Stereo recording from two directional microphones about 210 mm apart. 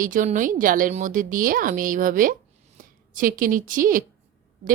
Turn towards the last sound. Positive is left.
turn(degrees=-40)  # may be behind; listen again after turning